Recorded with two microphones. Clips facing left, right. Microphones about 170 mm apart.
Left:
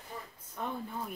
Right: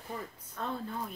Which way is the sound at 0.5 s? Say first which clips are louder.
Right 1 dB; 15° left (ahead or behind).